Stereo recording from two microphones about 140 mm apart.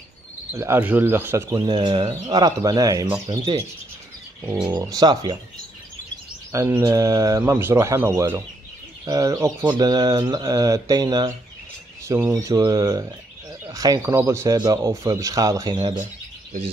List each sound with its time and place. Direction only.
0.5 s speech: 20° right (ahead or behind)
1.6 s speech: 35° right (ahead or behind)
4.6 s speech: 30° right (ahead or behind)
6.5 s speech: 20° right (ahead or behind)